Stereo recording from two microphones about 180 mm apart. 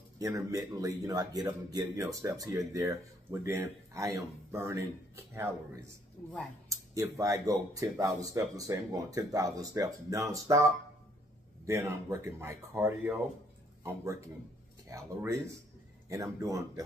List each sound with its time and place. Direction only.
0.2 s speech: 20° right (ahead or behind)